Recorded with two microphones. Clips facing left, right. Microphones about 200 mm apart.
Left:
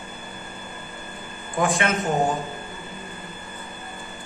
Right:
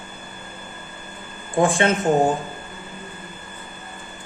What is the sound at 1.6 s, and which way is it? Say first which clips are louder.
Speech: right 4 dB; 30° right (ahead or behind).